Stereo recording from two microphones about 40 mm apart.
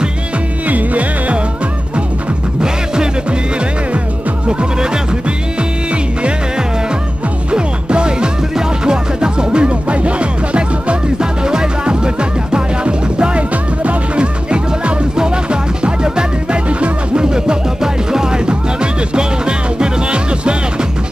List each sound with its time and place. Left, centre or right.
0.7 s music: right
2.6 s music: centre
4.5 s music: right
7.5 s music: right
11.1 s music: centre